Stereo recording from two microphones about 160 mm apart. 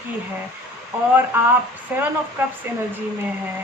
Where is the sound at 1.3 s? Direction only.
15° right (ahead or behind).